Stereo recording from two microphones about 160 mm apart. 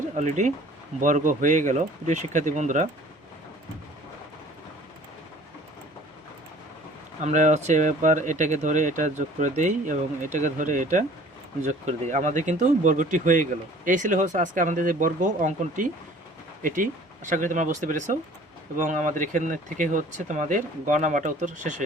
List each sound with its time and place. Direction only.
0.2 s speech: 50° right (ahead or behind)
7.3 s speech: 50° right (ahead or behind)